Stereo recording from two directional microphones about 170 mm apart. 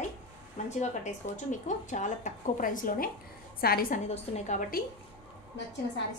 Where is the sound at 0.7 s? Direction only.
45° left (ahead or behind).